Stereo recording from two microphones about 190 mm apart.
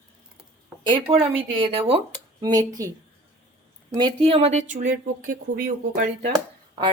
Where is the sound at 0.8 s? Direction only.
25° right (ahead or behind).